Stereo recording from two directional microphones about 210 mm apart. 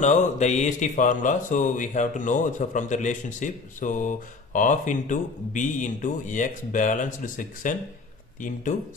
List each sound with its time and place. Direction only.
0.0 s speech: 35° left (ahead or behind)